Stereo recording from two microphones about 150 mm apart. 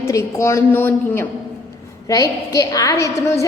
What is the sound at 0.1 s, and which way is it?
A woman's voice, 20° left (ahead or behind).